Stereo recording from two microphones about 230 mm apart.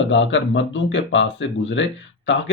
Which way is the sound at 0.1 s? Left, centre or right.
Left.